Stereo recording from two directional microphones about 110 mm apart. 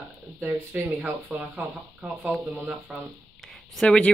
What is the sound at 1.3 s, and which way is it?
Speech, 15° right (ahead or behind).